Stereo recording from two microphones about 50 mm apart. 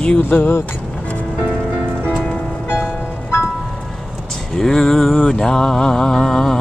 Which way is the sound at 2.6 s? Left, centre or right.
Left.